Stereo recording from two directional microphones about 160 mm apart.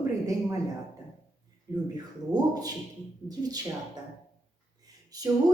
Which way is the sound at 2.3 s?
25° right (ahead or behind).